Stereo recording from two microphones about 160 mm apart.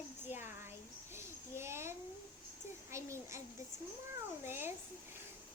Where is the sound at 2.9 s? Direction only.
20° right (ahead or behind).